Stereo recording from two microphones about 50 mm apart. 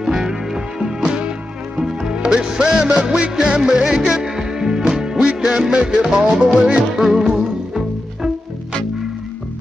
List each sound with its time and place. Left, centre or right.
0.0 s music: centre